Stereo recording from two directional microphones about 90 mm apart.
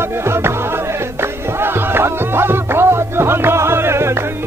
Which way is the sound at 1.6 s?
25° right (ahead or behind).